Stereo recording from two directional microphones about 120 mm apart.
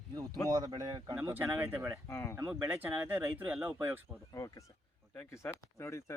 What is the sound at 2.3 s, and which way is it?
Speech, 25° right (ahead or behind).